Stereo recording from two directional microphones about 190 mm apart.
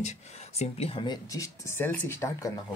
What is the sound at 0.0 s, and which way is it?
Speech, 35° left (ahead or behind).